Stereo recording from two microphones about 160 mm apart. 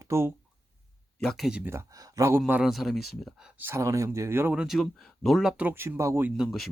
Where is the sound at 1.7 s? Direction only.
20° right (ahead or behind).